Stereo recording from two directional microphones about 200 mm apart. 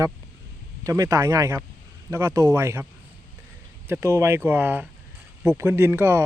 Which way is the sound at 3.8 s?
10° right (ahead or behind).